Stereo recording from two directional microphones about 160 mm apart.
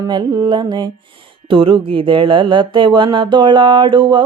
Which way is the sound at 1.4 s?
30° right (ahead or behind).